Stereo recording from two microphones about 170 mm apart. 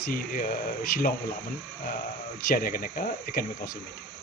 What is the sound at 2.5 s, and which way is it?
Insect, 55° left (ahead or behind).